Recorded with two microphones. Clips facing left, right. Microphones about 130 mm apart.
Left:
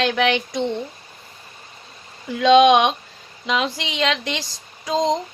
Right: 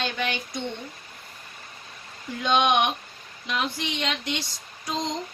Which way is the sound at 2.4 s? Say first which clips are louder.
Left 9 dB; 90° left.